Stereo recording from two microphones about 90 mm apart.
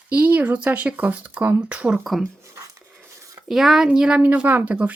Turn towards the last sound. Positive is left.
turn(degrees=-20)  # may be behind; listen again after turning